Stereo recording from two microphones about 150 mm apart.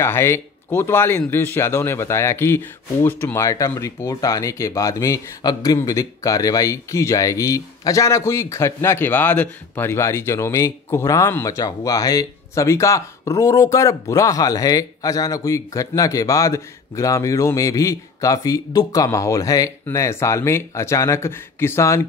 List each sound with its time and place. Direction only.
0.0 s speech: 15° left (ahead or behind)